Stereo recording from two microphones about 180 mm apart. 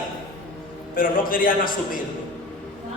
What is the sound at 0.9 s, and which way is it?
Speech, 50° left (ahead or behind).